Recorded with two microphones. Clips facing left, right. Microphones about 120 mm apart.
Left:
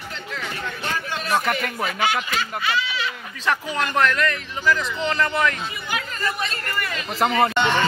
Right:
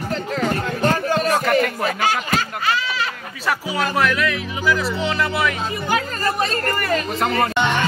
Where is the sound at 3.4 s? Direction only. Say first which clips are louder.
Right 2 dB; 5° right (ahead or behind).